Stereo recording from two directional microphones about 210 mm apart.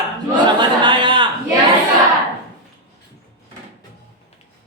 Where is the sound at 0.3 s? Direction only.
20° right (ahead or behind).